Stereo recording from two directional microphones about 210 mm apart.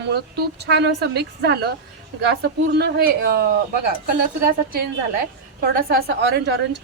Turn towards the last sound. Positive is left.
turn(degrees=-55)  # may be behind; listen again after turning